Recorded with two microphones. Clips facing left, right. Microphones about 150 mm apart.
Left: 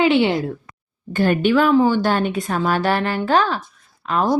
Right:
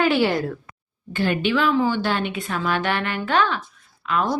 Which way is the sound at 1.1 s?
45° left (ahead or behind).